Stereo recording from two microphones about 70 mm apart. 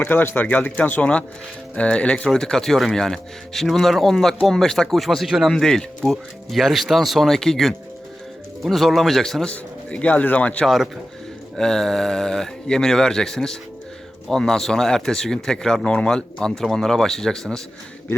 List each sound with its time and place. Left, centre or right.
0.0 s speech: left
2.3 s speech: centre
9.5 s speech: centre
11.5 s speech: centre